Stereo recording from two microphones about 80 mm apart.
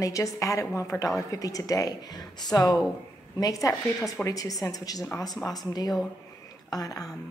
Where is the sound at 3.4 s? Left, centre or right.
Left.